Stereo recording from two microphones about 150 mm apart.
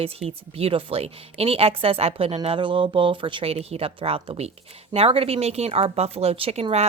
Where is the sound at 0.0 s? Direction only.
40° right (ahead or behind).